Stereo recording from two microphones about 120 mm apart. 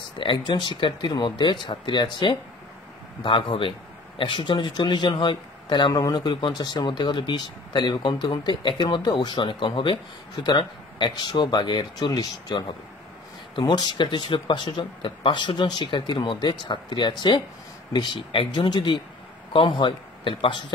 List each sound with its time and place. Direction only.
0.2 s speech: 40° left (ahead or behind)